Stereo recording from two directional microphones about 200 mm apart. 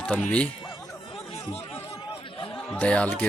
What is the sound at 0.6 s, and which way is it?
Music, 25° left (ahead or behind).